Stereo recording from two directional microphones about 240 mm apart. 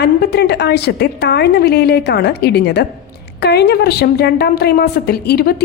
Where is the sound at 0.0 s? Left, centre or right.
Left.